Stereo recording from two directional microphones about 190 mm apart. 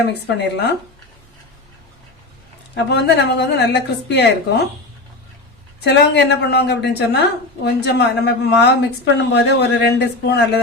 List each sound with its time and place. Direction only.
0.0 s a woman's voice: 60° left (ahead or behind)
2.7 s a woman's voice: 60° left (ahead or behind)
5.8 s a woman's voice: 60° left (ahead or behind)